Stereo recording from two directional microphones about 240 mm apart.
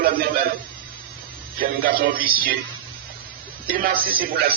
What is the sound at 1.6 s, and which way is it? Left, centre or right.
Music, right.